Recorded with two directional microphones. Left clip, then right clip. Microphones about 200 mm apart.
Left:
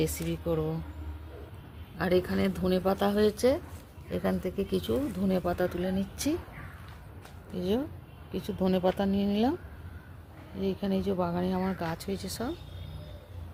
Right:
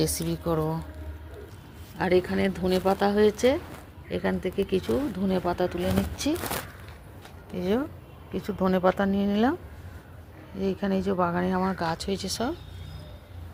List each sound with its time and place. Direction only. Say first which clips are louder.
0.0 s speech: right 3 dB; 10° right (ahead or behind)
2.0 s speech: right 4 dB; centre (ahead or behind)
7.5 s speech: right 3 dB; 10° right (ahead or behind)
10.6 s speech: right 4 dB; 15° right (ahead or behind)